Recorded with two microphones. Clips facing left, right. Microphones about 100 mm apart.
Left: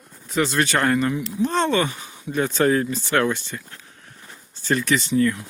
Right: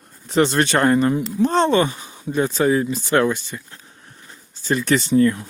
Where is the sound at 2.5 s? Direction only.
10° right (ahead or behind).